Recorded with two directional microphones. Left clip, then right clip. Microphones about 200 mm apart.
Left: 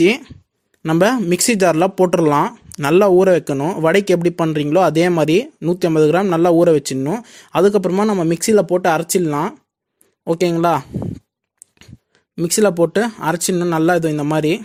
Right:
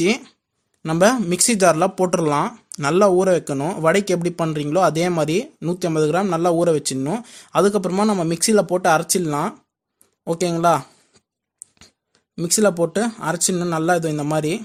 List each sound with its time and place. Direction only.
0.0 s speech: 30° left (ahead or behind)